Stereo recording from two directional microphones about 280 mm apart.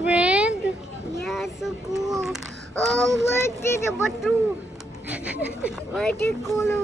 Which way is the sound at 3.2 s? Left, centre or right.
Centre.